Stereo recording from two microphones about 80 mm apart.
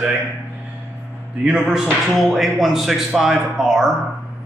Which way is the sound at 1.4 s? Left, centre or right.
Centre.